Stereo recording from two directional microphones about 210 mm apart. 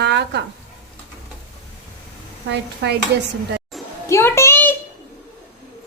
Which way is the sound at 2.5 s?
55° right (ahead or behind).